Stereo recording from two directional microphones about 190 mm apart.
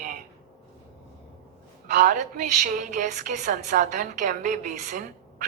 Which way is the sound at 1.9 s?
45° right (ahead or behind).